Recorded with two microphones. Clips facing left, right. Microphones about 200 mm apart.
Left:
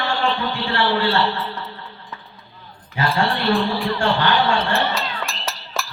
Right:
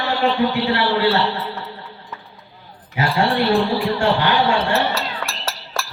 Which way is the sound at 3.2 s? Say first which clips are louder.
Right 4 dB; 10° right (ahead or behind).